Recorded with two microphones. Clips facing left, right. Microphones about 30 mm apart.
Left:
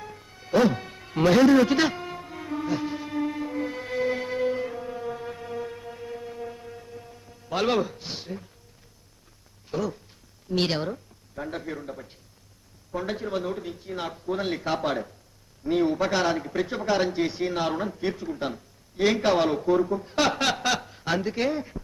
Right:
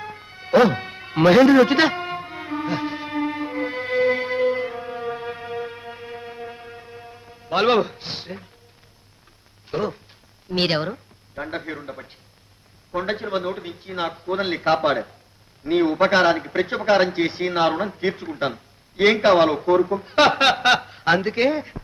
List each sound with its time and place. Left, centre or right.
0.0 s music: right
9.6 s a man's voice: right